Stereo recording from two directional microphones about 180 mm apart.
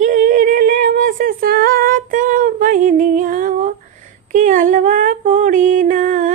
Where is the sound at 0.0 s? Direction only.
45° right (ahead or behind).